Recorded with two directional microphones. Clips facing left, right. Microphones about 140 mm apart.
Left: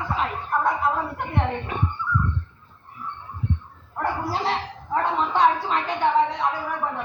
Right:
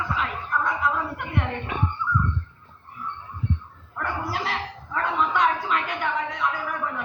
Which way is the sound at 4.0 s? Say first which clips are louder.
Left 3 dB; 30° left (ahead or behind).